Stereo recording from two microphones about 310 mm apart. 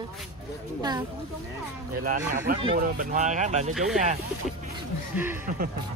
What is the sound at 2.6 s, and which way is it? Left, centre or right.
Speech, right.